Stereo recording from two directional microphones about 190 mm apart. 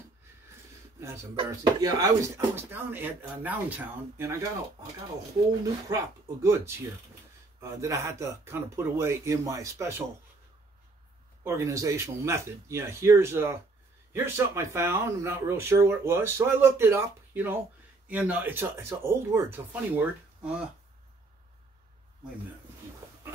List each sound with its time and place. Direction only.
1.3 s speech: 20° right (ahead or behind)
5.9 s speech: 15° right (ahead or behind)
7.8 s speech: 15° right (ahead or behind)
11.4 s speech: 15° right (ahead or behind)